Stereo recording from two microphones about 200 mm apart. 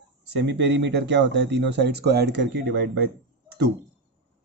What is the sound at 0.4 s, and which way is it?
Speech, 60° right (ahead or behind).